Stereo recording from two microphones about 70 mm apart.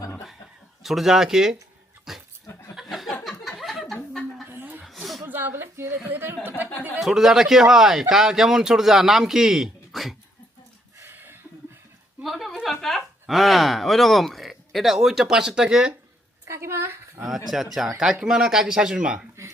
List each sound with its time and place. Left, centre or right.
0.8 s speech: centre
2.1 s dog: centre
2.9 s a sound: centre
4.4 s chuckle: right
4.9 s chuckle: centre
5.3 s a sound: right
5.6 s a sound: right
6.1 s a woman's voice: right
7.0 s speech: centre
11.0 s a sound: right
12.2 s speech: centre
16.5 s a woman's voice: right
17.2 s speech: centre